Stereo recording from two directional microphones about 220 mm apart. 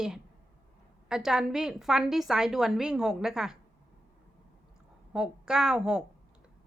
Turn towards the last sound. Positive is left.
turn(degrees=-5)  # may be behind; listen again after turning